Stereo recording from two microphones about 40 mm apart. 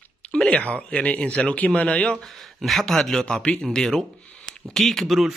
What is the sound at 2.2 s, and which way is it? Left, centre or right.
Speech, centre.